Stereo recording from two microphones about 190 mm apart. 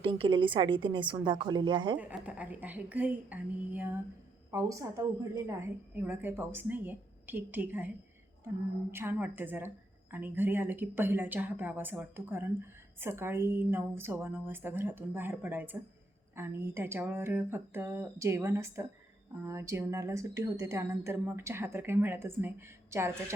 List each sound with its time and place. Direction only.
0.0 s a woman's voice: 30° right (ahead or behind)
2.0 s speech: 10° right (ahead or behind)
8.9 s speech: 10° right (ahead or behind)